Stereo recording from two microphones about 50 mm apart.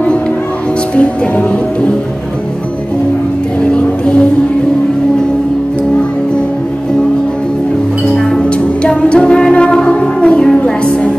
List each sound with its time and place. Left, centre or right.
0.9 s music: left
3.7 s music: left
8.4 s music: left